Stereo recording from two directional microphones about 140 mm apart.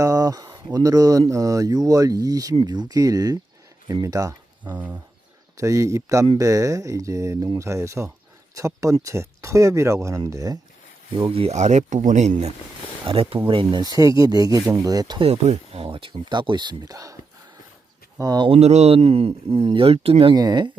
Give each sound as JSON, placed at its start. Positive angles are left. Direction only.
{"t": 0.0, "sound": "speech", "side_deg": -25}
{"t": 5.5, "sound": "speech", "side_deg": -25}
{"t": 11.2, "sound": "speech", "side_deg": -45}
{"t": 13.1, "sound": "speech", "side_deg": -40}
{"t": 15.3, "sound": "speech", "side_deg": -45}
{"t": 18.2, "sound": "speech", "side_deg": -30}
{"t": 20.3, "sound": "speech", "side_deg": -30}